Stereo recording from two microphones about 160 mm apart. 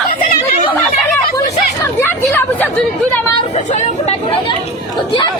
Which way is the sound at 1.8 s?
15° left (ahead or behind).